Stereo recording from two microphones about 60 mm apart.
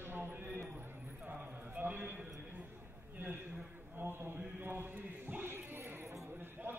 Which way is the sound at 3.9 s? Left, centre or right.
Right.